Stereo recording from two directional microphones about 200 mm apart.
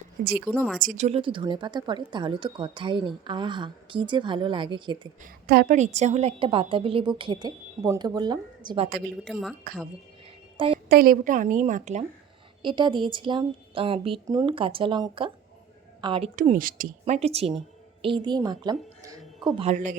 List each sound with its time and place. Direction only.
0.4 s speech: 5° left (ahead or behind)
0.8 s speech: 40° right (ahead or behind)
5.2 s speech: 45° right (ahead or behind); by 8.9 s 25° right (ahead or behind)
9.2 s speech: centre (ahead or behind)
10.8 s a woman's voice: 45° right (ahead or behind)
12.6 s a woman's voice: 25° right (ahead or behind)
16.3 s a woman's voice: 40° right (ahead or behind)
17.2 s a woman's voice: 30° right (ahead or behind)
19.7 s a woman's voice: 40° right (ahead or behind)